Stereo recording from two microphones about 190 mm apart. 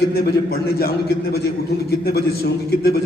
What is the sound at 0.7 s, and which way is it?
A man's voice, 55° left (ahead or behind).